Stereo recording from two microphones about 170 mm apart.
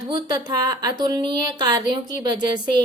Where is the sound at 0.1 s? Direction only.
25° right (ahead or behind).